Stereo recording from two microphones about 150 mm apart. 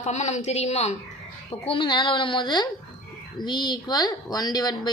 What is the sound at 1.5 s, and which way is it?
A woman's voice, 35° left (ahead or behind).